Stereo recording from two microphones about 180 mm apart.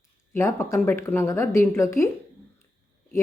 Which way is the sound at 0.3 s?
15° left (ahead or behind).